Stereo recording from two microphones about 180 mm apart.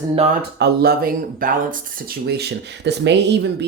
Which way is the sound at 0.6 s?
60° right (ahead or behind).